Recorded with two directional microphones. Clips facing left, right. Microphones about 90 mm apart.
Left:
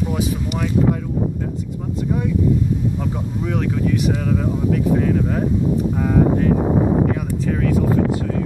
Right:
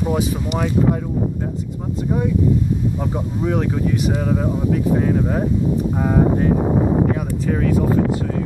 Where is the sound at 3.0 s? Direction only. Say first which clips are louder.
Right 2 dB; 20° right (ahead or behind).